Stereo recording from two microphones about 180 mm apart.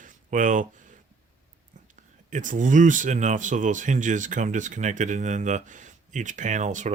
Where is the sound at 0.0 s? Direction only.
45° right (ahead or behind).